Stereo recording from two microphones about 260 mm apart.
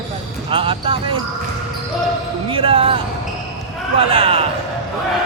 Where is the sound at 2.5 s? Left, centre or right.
Right.